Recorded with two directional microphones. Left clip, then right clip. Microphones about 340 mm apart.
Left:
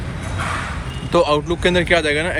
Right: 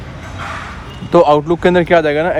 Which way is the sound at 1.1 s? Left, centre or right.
Right.